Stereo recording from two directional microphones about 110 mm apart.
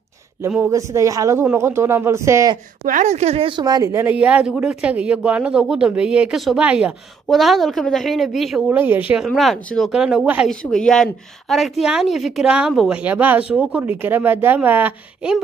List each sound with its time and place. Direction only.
0.7 s speech: 30° right (ahead or behind)
3.0 s speech: 90° right; by 3.5 s 70° right (ahead or behind)
3.5 s speech: 40° right (ahead or behind)
4.1 s a woman's voice: 10° right (ahead or behind)
8.7 s speech: 15° right (ahead or behind)
10.5 s a woman's voice: 5° left (ahead or behind)
13.0 s speech: 15° right (ahead or behind)